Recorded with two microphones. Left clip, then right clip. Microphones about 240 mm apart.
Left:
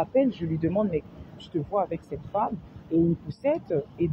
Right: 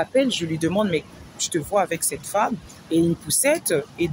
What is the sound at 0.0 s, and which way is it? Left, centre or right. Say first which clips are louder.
Speech: right 4 dB; right.